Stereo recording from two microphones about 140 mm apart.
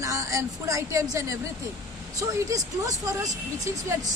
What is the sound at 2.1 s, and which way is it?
Speech, 25° right (ahead or behind).